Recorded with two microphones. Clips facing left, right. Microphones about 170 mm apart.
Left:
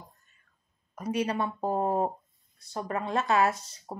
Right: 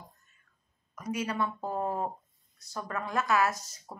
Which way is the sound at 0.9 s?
30° left (ahead or behind).